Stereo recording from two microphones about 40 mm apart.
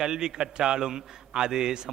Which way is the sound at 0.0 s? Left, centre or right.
Centre.